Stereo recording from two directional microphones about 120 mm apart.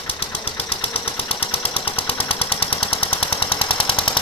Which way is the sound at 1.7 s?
50° left (ahead or behind).